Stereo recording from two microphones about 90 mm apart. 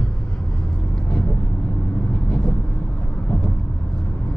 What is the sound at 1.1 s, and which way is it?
Vehicle, 20° left (ahead or behind).